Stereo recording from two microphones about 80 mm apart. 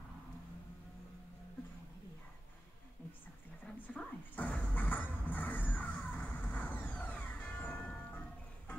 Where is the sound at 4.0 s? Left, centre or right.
Centre.